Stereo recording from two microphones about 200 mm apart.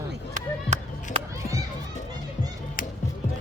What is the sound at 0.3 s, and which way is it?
Music, 35° right (ahead or behind).